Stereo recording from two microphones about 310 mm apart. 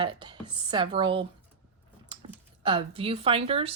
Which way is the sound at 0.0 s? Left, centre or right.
Centre.